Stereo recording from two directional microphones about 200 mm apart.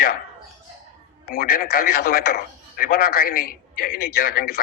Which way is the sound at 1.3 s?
50° left (ahead or behind).